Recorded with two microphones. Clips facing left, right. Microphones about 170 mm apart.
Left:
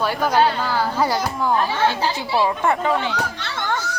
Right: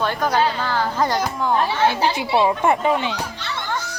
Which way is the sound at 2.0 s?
20° right (ahead or behind).